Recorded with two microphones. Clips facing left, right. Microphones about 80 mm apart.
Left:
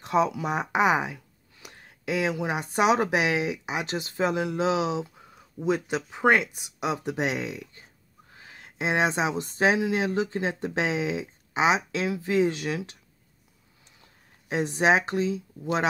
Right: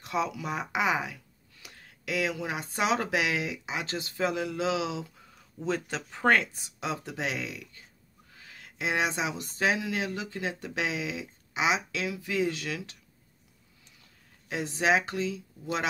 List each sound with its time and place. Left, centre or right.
0.0 s speech: left